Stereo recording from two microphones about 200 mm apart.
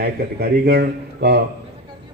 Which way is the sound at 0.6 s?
55° right (ahead or behind).